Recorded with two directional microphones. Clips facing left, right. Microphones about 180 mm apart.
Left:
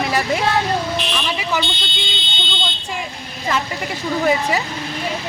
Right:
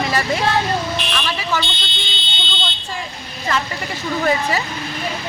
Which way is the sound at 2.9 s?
15° left (ahead or behind).